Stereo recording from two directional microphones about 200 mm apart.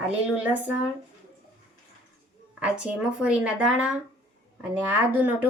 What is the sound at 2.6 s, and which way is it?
Speech, 5° right (ahead or behind).